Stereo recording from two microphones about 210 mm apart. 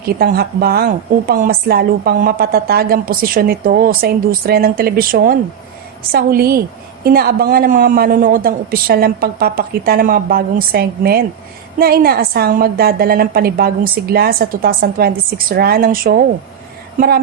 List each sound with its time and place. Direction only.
0.2 s a woman's voice: 45° right (ahead or behind)